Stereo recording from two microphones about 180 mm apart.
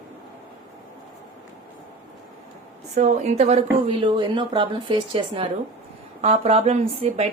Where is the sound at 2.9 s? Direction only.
40° right (ahead or behind).